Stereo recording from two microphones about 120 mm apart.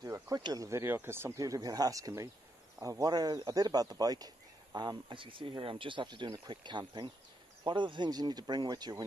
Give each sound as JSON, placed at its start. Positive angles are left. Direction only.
{"t": 0.0, "sound": "speech", "side_deg": -30}